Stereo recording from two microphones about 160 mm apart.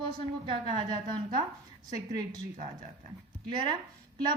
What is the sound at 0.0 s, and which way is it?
A woman's voice, 35° right (ahead or behind).